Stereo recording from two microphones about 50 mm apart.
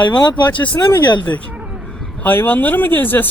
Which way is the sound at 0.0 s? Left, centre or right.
Left.